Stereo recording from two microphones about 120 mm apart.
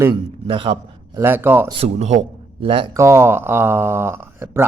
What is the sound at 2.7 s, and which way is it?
Speech, 45° right (ahead or behind).